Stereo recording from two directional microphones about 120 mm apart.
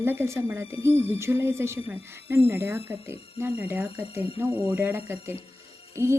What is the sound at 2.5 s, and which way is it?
Speech, 20° right (ahead or behind).